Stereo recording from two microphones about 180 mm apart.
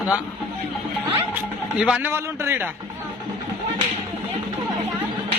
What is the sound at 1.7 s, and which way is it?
Speech, 5° right (ahead or behind).